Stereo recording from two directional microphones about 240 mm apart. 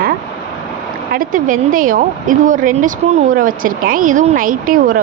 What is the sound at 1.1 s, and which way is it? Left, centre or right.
Speech, right.